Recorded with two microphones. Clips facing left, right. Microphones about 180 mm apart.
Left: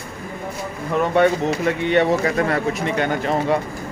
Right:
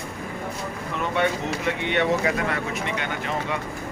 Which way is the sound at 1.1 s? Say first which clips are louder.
Left 7 dB; 40° left (ahead or behind).